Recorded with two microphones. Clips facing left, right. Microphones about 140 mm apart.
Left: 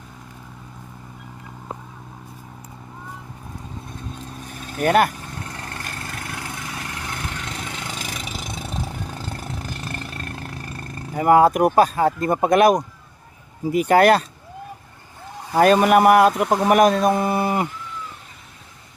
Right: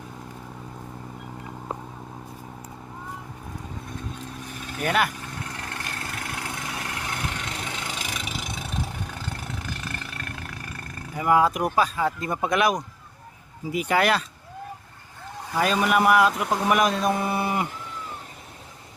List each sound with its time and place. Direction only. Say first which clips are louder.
4.8 s speech: left 7 dB; 45° left (ahead or behind)
8.1 s vehicle: left 1 dB; 40° left (ahead or behind)
11.1 s speech: left 6 dB; 50° left (ahead or behind)
15.5 s speech: left 8 dB; 55° left (ahead or behind)